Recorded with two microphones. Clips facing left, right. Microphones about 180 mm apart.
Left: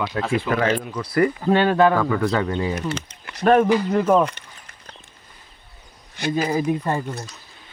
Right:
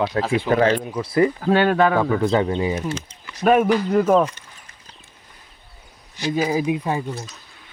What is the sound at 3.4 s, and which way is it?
Speech, 10° right (ahead or behind).